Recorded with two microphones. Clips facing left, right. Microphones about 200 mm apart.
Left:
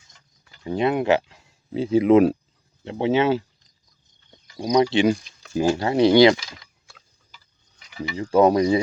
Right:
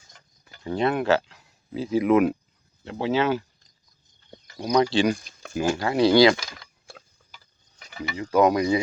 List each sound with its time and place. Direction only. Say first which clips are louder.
0.6 s speech: left 2 dB; 15° left (ahead or behind)
4.5 s speech: left 2 dB; 15° left (ahead or behind)
6.3 s tick-tock: left 2 dB; 50° right (ahead or behind)
8.1 s speech: left 3 dB; 30° left (ahead or behind)